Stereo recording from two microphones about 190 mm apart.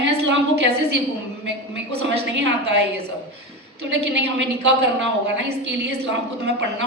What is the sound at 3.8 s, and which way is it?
A woman's voice, 65° right (ahead or behind).